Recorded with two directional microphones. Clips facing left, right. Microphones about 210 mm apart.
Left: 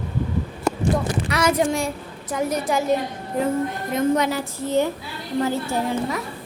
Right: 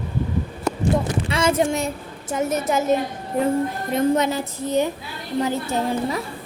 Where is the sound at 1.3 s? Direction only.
25° right (ahead or behind).